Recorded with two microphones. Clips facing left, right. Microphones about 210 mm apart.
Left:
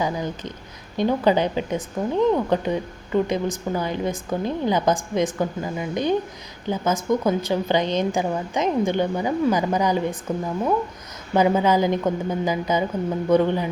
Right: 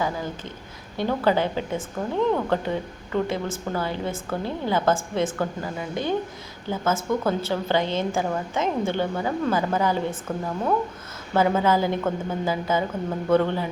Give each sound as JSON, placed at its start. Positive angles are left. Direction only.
{"t": 0.0, "sound": "a woman's voice", "side_deg": 20}